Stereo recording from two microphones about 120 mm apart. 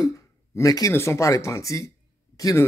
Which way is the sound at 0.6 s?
30° left (ahead or behind).